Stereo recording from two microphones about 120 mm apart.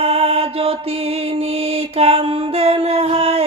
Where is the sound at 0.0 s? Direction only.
55° right (ahead or behind).